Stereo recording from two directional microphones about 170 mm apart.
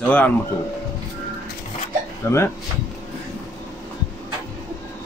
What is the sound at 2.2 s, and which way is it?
Speech, 15° left (ahead or behind).